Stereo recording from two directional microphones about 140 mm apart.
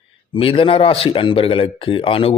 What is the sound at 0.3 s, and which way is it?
A man's voice, 40° left (ahead or behind).